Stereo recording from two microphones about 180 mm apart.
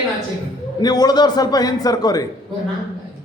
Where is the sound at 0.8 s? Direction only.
20° left (ahead or behind).